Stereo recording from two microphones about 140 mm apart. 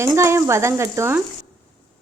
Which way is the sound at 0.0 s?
20° right (ahead or behind).